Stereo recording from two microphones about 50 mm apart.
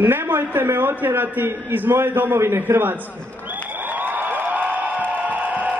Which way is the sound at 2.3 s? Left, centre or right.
Right.